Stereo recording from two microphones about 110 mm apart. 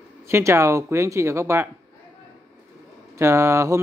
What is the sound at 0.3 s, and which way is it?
Speech, 25° right (ahead or behind).